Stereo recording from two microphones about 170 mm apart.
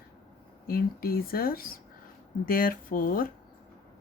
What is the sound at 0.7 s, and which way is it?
Speech, 60° left (ahead or behind).